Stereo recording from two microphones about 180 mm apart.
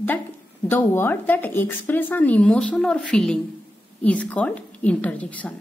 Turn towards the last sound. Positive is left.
turn(degrees=10)  # may be behind; listen again after turning